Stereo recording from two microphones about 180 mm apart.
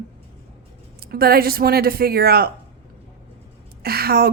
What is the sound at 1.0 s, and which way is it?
Speech, 60° right (ahead or behind).